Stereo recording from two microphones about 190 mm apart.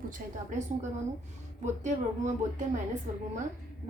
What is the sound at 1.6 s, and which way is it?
A woman's voice, 40° right (ahead or behind).